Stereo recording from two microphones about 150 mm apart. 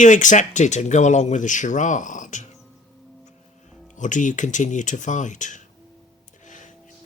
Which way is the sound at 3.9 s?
55° left (ahead or behind).